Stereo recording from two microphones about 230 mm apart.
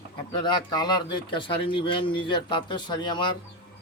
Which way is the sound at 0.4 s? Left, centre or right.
Centre.